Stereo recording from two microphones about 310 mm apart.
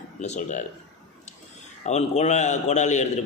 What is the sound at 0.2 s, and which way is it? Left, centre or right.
Speech, left.